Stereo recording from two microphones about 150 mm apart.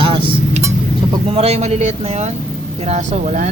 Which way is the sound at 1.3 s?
45° right (ahead or behind).